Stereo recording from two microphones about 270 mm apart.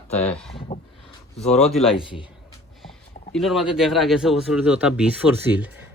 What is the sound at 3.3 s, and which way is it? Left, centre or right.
Speech, centre.